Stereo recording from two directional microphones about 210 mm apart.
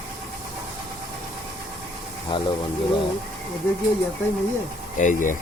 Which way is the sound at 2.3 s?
25° left (ahead or behind).